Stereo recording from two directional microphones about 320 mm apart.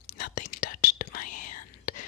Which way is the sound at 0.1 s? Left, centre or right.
Left.